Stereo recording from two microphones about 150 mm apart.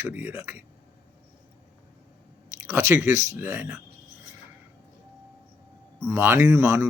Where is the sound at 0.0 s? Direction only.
15° right (ahead or behind).